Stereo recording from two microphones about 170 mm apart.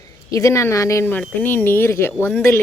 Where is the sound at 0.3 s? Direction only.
20° left (ahead or behind).